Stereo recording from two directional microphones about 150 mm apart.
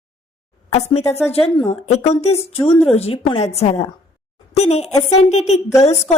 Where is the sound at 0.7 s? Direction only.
45° left (ahead or behind).